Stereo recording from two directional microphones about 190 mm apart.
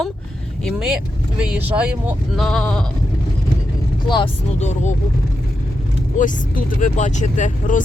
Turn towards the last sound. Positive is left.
turn(degrees=40)  # may be behind; listen again after turning